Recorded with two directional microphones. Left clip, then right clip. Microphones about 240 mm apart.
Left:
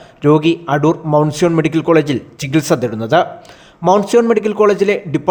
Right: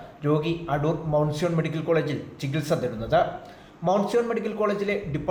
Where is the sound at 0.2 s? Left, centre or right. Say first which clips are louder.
Left 13 dB; left.